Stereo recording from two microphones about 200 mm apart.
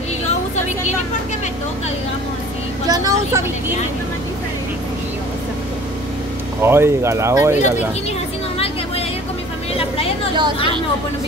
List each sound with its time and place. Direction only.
2.9 s speech: 15° right (ahead or behind)
6.6 s speech: 10° right (ahead or behind)
9.8 s vehicle: 30° left (ahead or behind)